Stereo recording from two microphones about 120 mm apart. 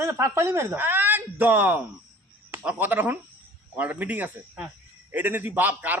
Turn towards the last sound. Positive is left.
turn(degrees=-15)  # may be behind; listen again after turning